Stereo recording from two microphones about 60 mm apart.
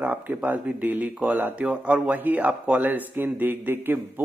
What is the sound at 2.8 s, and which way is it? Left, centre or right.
Speech, right.